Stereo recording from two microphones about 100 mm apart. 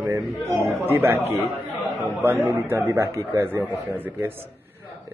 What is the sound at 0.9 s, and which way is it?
Speech, 25° right (ahead or behind).